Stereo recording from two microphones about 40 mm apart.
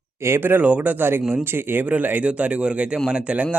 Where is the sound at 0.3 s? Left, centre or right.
Right.